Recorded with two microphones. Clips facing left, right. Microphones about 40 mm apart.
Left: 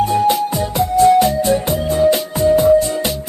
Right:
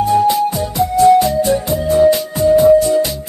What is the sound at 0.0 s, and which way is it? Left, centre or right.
Music, left.